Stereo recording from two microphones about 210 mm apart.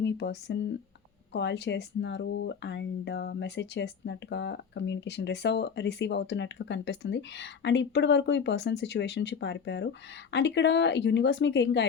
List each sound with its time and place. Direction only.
0.0 s speech: 55° left (ahead or behind)